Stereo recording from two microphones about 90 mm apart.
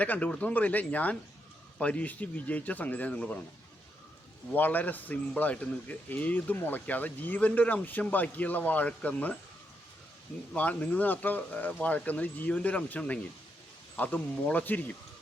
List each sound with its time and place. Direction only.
0.0 s speech: 15° left (ahead or behind)
4.5 s speech: 20° left (ahead or behind)
10.5 s speech: 15° left (ahead or behind)